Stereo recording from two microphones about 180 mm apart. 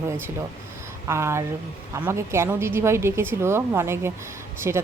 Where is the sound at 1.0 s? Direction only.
15° right (ahead or behind).